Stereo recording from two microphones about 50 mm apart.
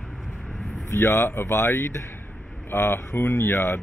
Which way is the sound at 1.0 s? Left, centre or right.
Left.